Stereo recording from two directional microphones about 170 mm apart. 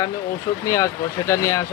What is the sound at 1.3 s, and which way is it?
Speech, 15° left (ahead or behind).